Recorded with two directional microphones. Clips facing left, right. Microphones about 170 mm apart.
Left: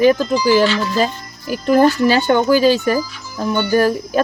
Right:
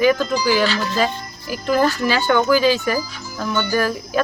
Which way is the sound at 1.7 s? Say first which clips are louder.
Left 5 dB; 40° left (ahead or behind).